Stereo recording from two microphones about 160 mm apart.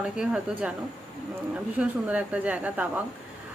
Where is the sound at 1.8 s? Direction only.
10° right (ahead or behind).